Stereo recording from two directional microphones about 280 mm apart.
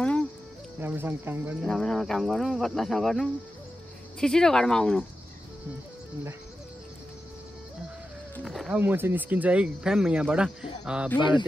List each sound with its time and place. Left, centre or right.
0.7 s speech: centre
8.4 s speech: centre
11.1 s speech: centre